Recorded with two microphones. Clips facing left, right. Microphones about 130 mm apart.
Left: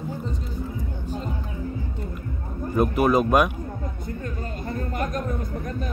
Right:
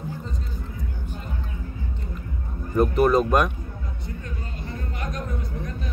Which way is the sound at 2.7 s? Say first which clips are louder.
Right 1 dB; 5° left (ahead or behind).